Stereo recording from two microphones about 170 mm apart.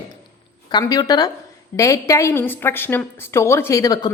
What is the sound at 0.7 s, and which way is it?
A woman's voice, 25° left (ahead or behind).